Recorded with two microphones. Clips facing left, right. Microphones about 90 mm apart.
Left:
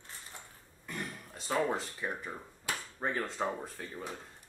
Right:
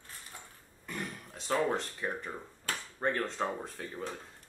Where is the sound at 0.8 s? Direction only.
Centre (ahead or behind).